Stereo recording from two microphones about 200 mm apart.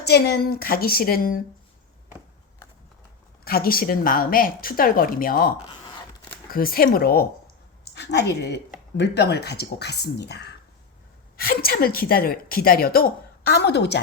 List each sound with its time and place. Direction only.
0.0 s a woman's voice: 55° left (ahead or behind)
3.4 s a woman's voice: 50° left (ahead or behind)